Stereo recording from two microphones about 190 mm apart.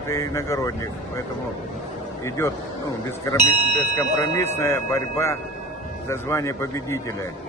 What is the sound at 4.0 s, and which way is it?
Speech, 15° left (ahead or behind).